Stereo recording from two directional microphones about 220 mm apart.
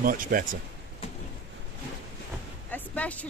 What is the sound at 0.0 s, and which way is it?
Speech, 40° right (ahead or behind).